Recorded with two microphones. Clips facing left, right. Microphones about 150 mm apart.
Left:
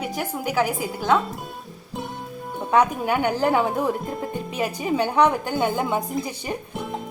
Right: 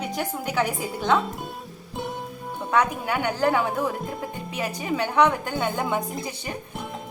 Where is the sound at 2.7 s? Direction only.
20° left (ahead or behind).